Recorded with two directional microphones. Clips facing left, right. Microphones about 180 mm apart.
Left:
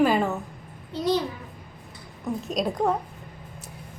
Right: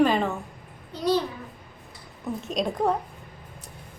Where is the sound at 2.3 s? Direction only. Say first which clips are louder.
Even; centre (ahead or behind).